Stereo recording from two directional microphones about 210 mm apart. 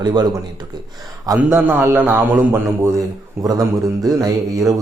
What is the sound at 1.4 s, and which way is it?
A man's voice, 10° right (ahead or behind).